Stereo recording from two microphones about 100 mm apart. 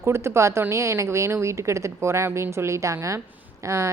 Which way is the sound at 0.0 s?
25° right (ahead or behind).